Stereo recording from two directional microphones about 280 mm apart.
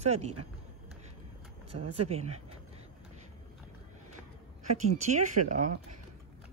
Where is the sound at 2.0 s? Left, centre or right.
Right.